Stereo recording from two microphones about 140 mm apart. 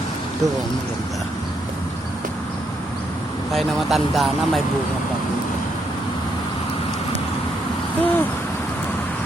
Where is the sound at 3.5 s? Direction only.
Centre (ahead or behind).